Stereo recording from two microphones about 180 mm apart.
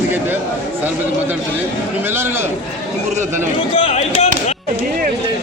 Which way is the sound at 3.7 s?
35° left (ahead or behind).